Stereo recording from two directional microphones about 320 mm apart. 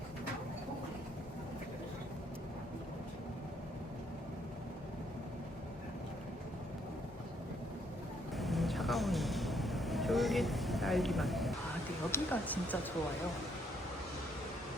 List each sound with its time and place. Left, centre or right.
8.4 s vehicle: centre
12.1 s speech: centre